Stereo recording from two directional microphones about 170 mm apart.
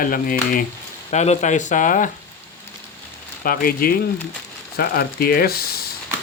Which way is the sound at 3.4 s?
55° left (ahead or behind).